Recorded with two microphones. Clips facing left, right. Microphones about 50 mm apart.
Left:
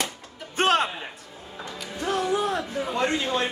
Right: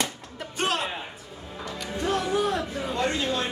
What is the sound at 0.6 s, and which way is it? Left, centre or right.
Music, left.